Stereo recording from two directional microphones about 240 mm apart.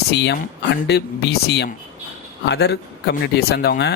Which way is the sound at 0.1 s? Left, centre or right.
Left.